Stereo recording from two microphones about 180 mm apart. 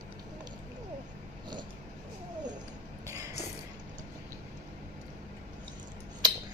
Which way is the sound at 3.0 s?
15° right (ahead or behind).